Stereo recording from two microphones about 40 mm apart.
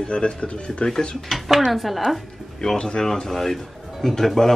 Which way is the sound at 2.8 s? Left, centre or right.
Centre.